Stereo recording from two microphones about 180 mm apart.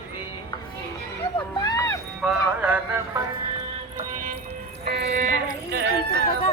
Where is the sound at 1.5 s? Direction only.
20° left (ahead or behind).